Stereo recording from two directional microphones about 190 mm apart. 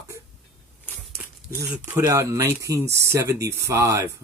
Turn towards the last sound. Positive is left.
turn(degrees=-15)  # may be behind; listen again after turning